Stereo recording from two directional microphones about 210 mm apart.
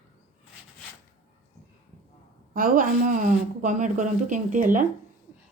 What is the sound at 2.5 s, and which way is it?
Speech, 40° right (ahead or behind).